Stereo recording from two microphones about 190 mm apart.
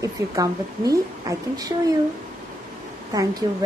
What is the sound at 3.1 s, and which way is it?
Speech, 20° right (ahead or behind).